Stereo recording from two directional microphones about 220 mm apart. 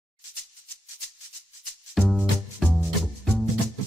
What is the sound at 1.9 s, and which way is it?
Music, centre (ahead or behind).